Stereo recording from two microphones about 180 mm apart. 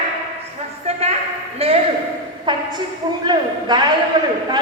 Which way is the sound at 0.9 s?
35° right (ahead or behind).